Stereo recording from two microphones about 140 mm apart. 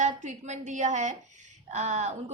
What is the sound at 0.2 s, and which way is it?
A woman's voice, 55° right (ahead or behind).